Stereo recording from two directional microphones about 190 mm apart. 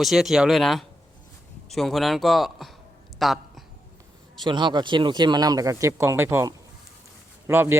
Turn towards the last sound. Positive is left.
turn(degrees=-10)  # may be behind; listen again after turning